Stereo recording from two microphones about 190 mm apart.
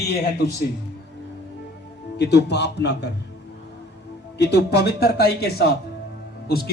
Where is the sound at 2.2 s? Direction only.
60° left (ahead or behind).